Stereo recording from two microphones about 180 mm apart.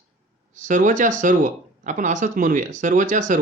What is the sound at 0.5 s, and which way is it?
Speech, 45° right (ahead or behind).